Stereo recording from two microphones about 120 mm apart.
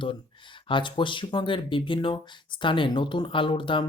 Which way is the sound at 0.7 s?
40° left (ahead or behind).